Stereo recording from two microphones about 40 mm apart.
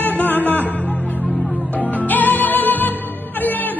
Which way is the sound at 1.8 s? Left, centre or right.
Left.